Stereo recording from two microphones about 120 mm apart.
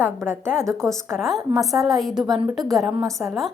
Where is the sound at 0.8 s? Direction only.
5° left (ahead or behind).